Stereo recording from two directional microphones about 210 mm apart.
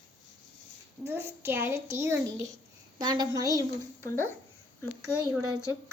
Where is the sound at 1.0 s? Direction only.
10° right (ahead or behind).